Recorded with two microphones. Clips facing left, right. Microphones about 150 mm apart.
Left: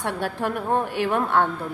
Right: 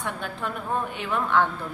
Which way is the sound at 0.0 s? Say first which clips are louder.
Left 5 dB; 65° left (ahead or behind).